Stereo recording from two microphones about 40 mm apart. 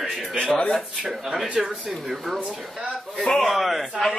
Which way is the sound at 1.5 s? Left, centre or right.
Right.